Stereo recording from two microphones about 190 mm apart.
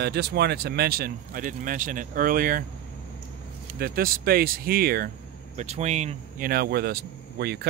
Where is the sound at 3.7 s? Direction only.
50° right (ahead or behind).